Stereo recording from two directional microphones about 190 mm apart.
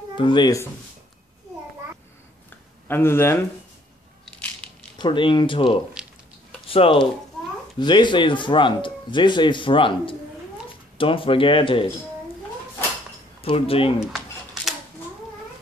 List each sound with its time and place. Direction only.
0.2 s speech: 25° left (ahead or behind)
2.9 s speech: 10° left (ahead or behind)
4.9 s speech: 25° left (ahead or behind)
13.4 s speech: 30° left (ahead or behind)
13.9 s a sound: centre (ahead or behind)